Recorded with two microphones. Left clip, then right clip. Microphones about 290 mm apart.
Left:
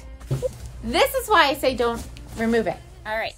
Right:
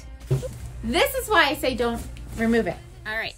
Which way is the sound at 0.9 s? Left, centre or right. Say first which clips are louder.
Left 2 dB; centre.